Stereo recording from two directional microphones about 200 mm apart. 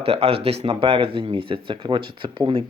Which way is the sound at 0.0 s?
30° right (ahead or behind).